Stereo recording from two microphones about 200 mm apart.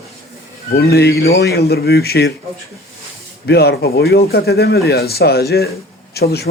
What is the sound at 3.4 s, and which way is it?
Speech, 55° left (ahead or behind).